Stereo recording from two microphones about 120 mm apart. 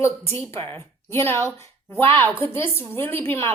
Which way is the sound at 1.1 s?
20° left (ahead or behind).